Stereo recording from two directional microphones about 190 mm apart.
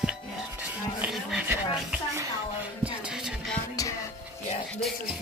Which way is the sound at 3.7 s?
20° left (ahead or behind).